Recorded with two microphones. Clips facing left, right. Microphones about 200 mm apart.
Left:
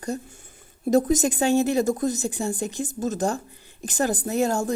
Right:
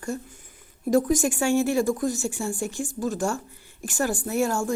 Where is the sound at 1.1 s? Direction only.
20° left (ahead or behind).